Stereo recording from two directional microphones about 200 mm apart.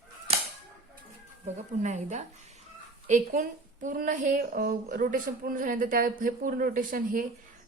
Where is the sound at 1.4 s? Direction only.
35° right (ahead or behind).